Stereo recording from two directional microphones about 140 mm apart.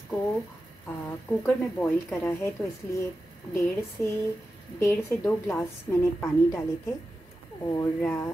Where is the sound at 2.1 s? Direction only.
15° left (ahead or behind).